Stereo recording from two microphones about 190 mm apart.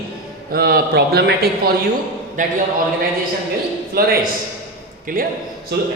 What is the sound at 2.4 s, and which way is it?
Speech, 45° right (ahead or behind).